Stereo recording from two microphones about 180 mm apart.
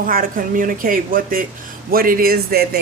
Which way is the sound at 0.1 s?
50° right (ahead or behind).